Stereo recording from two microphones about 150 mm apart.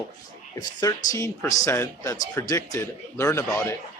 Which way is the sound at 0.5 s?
25° left (ahead or behind).